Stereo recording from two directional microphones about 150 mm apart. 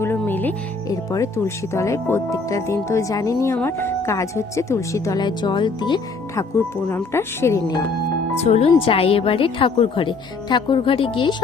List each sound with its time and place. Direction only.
0.0 s music: 15° left (ahead or behind)
0.9 s speech: 20° left (ahead or behind)
6.8 s speech: 15° left (ahead or behind)
8.4 s a woman's voice: 45° left (ahead or behind)